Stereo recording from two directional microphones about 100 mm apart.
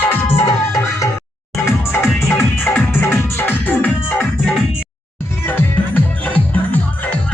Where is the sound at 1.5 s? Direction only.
25° left (ahead or behind).